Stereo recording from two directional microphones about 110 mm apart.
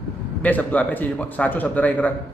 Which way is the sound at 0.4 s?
15° left (ahead or behind).